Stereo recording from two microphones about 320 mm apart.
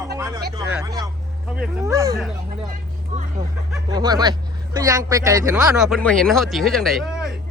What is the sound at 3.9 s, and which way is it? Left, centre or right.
Speech, centre.